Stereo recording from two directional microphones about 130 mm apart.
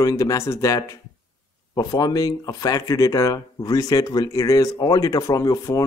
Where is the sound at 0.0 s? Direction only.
25° left (ahead or behind).